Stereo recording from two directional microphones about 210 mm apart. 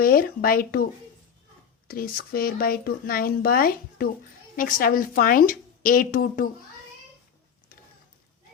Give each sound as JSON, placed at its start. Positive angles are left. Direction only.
{"t": 0.0, "sound": "speech", "side_deg": 45}
{"t": 1.9, "sound": "a woman's voice", "side_deg": 45}